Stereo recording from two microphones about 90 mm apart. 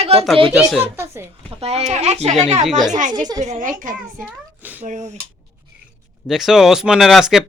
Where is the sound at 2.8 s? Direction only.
50° right (ahead or behind).